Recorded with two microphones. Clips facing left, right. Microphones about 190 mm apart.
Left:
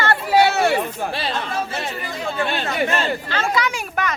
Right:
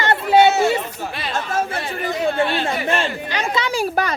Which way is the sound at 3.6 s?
35° right (ahead or behind).